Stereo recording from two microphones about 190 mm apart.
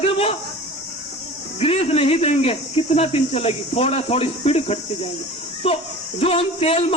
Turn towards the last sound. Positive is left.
turn(degrees=30)  # may be behind; listen again after turning